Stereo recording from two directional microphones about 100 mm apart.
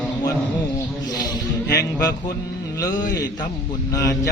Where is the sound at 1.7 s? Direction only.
35° left (ahead or behind).